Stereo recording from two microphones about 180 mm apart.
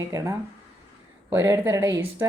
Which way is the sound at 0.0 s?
15° right (ahead or behind).